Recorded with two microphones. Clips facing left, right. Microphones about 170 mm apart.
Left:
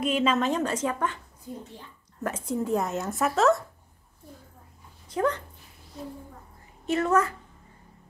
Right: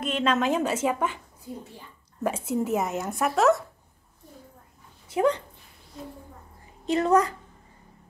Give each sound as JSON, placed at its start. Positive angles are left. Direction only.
{"t": 0.0, "sound": "a woman's voice", "side_deg": 5}
{"t": 2.2, "sound": "a woman's voice", "side_deg": -10}
{"t": 2.7, "sound": "speech", "side_deg": 0}
{"t": 5.1, "sound": "speech", "side_deg": -15}
{"t": 6.9, "sound": "a woman's voice", "side_deg": -15}